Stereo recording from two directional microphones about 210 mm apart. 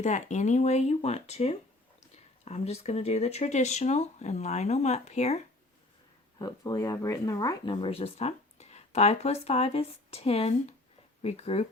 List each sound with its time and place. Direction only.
0.0 s speech: 35° left (ahead or behind)
6.4 s speech: 15° left (ahead or behind)